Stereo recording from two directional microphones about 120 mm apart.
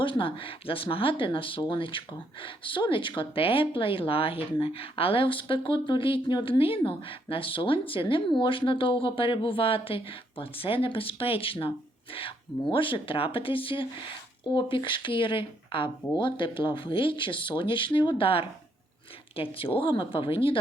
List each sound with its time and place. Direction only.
0.0 s speech: 45° left (ahead or behind)